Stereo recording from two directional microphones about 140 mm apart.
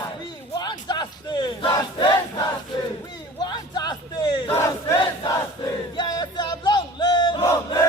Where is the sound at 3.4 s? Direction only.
30° left (ahead or behind).